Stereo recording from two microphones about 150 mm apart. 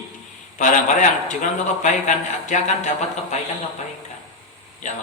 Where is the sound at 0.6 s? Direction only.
55° left (ahead or behind).